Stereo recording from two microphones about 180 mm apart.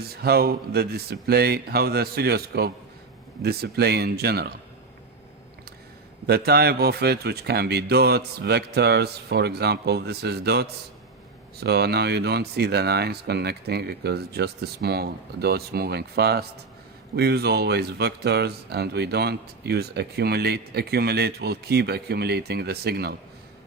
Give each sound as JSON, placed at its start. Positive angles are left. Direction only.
{"t": 0.1, "sound": "speech", "side_deg": -60}
{"t": 6.2, "sound": "speech", "side_deg": -60}